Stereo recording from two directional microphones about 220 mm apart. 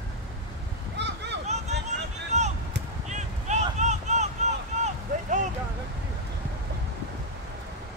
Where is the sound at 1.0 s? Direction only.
50° right (ahead or behind).